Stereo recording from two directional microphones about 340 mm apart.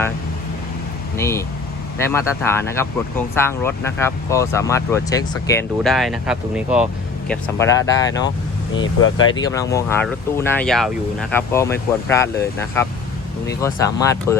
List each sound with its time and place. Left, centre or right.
1.1 s speech: centre
7.3 s speech: centre
8.7 s speech: left
9.3 s speech: centre